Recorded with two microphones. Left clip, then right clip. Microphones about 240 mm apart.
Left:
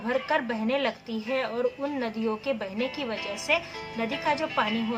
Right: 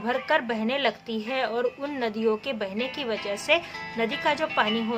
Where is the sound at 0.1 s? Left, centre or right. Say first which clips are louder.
Right 2 dB; right.